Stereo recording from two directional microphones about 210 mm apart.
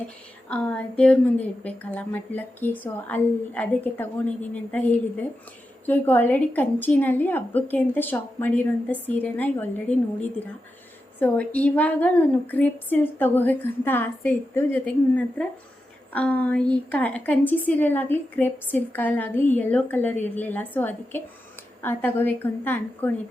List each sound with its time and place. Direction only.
0.4 s a woman's voice: 5° left (ahead or behind)
11.2 s a woman's voice: 5° left (ahead or behind)